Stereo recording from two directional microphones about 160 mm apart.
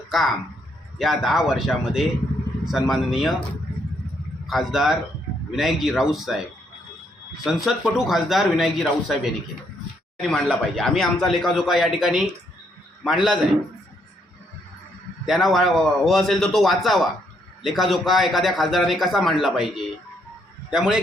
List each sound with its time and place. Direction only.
0.1 s a man's voice: centre (ahead or behind)
4.4 s a man's voice: centre (ahead or behind)
7.6 s a man's voice: 5° right (ahead or behind)
15.3 s a man's voice: centre (ahead or behind)